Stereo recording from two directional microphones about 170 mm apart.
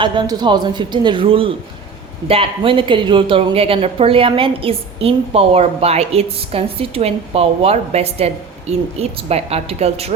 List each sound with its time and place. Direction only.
0.0 s a man's voice: 25° right (ahead or behind)